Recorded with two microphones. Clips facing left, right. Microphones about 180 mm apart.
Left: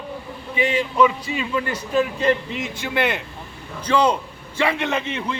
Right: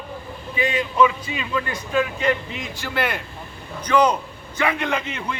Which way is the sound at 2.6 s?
20° left (ahead or behind).